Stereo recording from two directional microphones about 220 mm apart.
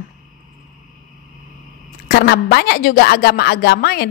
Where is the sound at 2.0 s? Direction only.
45° left (ahead or behind).